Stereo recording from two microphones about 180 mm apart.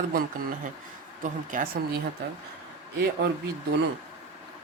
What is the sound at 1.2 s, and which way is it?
Speech, 45° right (ahead or behind).